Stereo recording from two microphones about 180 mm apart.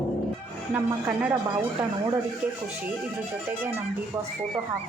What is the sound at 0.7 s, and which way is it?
Speech, 5° right (ahead or behind).